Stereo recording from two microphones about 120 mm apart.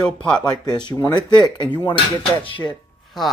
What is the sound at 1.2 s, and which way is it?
Speech, 40° left (ahead or behind).